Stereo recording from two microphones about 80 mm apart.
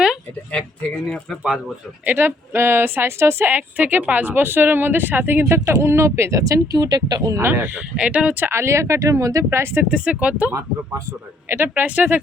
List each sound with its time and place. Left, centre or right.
2.0 s a woman's voice: right
3.5 s a woman's voice: right
5.5 s speech: right
6.7 s speech: right
7.3 s speech: right
9.9 s speech: centre
11.4 s a woman's voice: right
11.7 s a woman's voice: centre